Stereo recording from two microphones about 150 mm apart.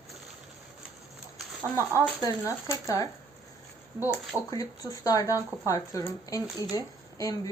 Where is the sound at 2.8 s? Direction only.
20° left (ahead or behind).